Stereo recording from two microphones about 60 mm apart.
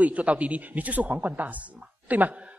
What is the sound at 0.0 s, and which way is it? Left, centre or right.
A man's voice, right.